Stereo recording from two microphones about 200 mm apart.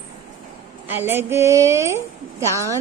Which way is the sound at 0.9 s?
10° right (ahead or behind).